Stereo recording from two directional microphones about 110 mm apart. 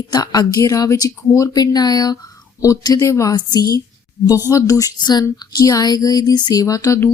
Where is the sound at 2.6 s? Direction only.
35° left (ahead or behind).